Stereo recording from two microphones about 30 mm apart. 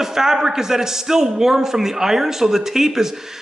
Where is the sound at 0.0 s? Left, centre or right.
Centre.